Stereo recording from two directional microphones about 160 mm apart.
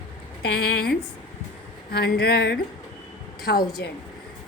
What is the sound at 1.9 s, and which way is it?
Speech, 90° left.